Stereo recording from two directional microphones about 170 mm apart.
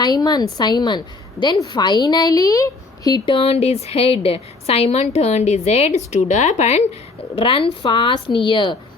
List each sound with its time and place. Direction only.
0.0 s a woman's voice: 25° left (ahead or behind)